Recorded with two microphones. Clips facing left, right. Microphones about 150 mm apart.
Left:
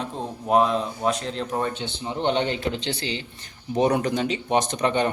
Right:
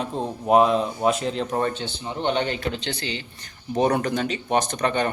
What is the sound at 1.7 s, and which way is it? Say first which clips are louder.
A man's voice: left 1 dB; 20° left (ahead or behind).